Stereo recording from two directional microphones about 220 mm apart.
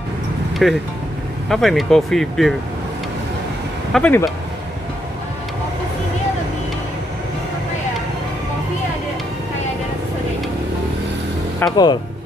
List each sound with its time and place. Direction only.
0.6 s speech: centre (ahead or behind)
3.9 s speech: 5° left (ahead or behind)
11.7 s speech: 20° left (ahead or behind)